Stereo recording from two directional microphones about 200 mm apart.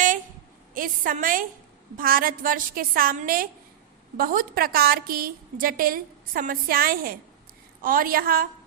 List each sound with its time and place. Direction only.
0.7 s a woman's voice: 45° right (ahead or behind)